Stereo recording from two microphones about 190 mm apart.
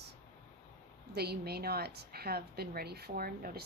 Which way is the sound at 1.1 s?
55° right (ahead or behind).